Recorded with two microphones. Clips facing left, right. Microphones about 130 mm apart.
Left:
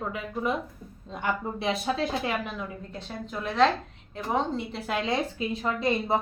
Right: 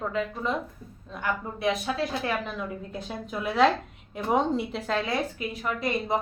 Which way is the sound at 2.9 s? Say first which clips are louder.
Right 2 dB; 10° right (ahead or behind).